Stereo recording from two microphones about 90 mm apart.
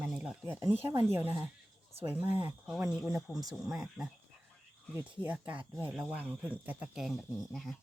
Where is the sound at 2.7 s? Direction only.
5° right (ahead or behind).